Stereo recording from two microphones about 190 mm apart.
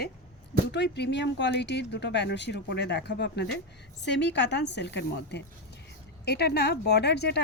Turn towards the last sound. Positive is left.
turn(degrees=60)  # may be behind; listen again after turning